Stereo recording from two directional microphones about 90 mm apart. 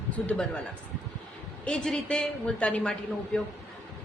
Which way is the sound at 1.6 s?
5° left (ahead or behind).